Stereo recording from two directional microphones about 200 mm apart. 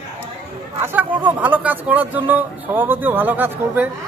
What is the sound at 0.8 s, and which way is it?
A woman's voice, 10° right (ahead or behind).